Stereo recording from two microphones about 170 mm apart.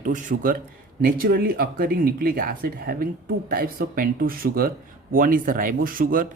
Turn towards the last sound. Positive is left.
turn(degrees=-55)  # may be behind; listen again after turning